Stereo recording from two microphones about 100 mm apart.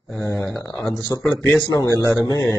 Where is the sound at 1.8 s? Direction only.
35° left (ahead or behind).